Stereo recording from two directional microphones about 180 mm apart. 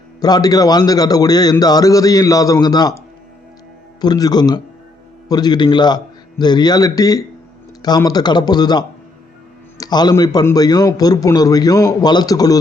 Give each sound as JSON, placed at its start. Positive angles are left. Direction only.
{"t": 0.2, "sound": "a man's voice", "side_deg": 20}
{"t": 4.0, "sound": "a man's voice", "side_deg": 20}